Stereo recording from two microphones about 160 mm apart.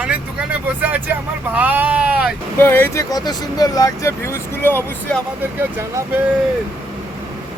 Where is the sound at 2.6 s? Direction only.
15° left (ahead or behind).